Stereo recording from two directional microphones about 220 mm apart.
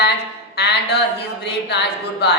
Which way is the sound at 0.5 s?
50° left (ahead or behind).